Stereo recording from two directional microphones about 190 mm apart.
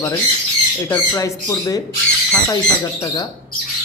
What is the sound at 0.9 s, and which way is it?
Speech, 15° left (ahead or behind).